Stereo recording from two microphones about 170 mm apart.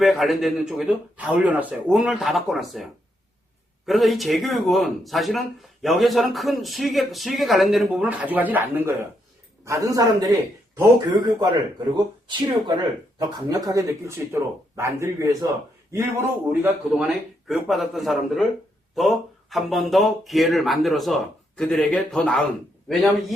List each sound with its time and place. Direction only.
0.0 s speech: centre (ahead or behind)
3.8 s speech: centre (ahead or behind); by 10.3 s 20° right (ahead or behind)
11.9 s speech: 25° right (ahead or behind); by 23.3 s centre (ahead or behind)